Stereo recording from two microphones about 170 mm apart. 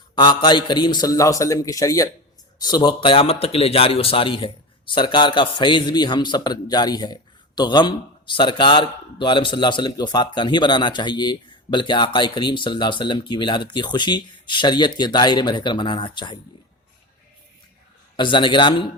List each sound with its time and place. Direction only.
0.2 s speech: 25° left (ahead or behind)
18.2 s speech: 30° left (ahead or behind)